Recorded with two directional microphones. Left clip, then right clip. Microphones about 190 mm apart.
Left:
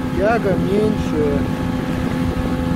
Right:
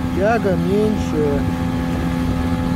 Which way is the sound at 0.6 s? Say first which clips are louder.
Even; 15° right (ahead or behind).